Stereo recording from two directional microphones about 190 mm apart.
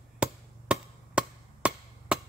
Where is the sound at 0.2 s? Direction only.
5° right (ahead or behind).